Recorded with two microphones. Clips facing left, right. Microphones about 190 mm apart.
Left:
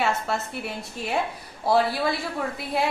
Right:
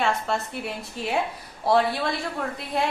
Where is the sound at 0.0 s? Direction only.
Centre (ahead or behind).